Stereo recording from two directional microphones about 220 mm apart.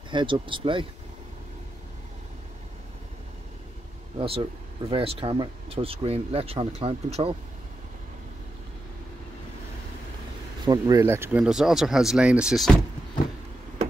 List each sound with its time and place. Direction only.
0.1 s speech: 20° right (ahead or behind)
4.2 s speech: 25° right (ahead or behind)
10.6 s speech: 15° right (ahead or behind); by 12.7 s centre (ahead or behind)